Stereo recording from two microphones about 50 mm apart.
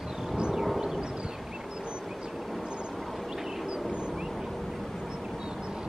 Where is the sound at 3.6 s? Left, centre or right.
Centre.